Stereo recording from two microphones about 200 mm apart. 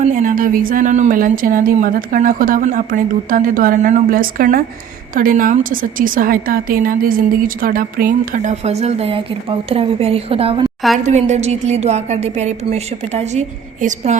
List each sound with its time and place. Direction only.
0.0 s a woman's voice: 40° right (ahead or behind)